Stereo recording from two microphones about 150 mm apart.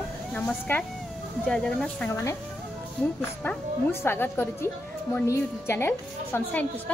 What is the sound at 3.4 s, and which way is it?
A woman's voice, 15° left (ahead or behind).